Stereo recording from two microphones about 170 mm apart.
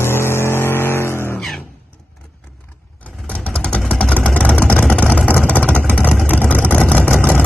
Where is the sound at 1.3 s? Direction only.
Centre (ahead or behind).